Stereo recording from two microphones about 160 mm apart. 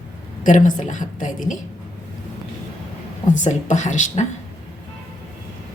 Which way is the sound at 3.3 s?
50° left (ahead or behind).